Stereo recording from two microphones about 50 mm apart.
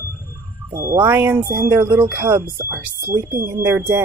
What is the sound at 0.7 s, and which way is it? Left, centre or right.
Speech, right.